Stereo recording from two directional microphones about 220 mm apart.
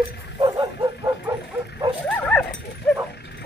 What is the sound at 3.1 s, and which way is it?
Dog, 50° left (ahead or behind).